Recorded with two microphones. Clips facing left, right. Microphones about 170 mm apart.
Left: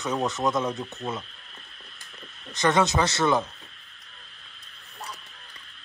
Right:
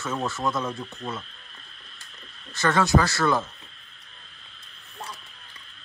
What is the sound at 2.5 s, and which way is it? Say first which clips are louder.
Speech: right 1 dB; 20° left (ahead or behind).